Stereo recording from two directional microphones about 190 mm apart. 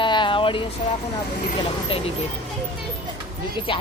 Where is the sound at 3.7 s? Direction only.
25° left (ahead or behind).